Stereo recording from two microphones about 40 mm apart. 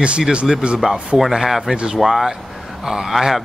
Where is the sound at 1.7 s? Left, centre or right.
Centre.